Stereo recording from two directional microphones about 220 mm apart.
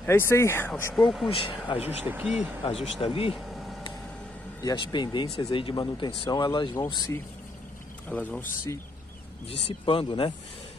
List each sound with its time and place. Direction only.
0.0 s speech: 10° left (ahead or behind)
1.3 s speech: 25° left (ahead or behind)
1.9 s speech: 10° right (ahead or behind)
3.0 s speech: 25° left (ahead or behind)
3.4 s vehicle: centre (ahead or behind)
4.6 s speech: 20° left (ahead or behind)
9.8 s speech: 25° left (ahead or behind)